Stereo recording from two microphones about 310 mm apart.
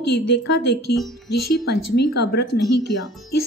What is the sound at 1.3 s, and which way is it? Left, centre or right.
Speech, left.